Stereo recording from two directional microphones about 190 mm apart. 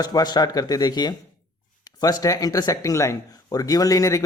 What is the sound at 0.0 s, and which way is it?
Speech, 20° left (ahead or behind).